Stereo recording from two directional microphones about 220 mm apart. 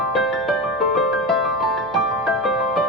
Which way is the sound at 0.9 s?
Centre (ahead or behind).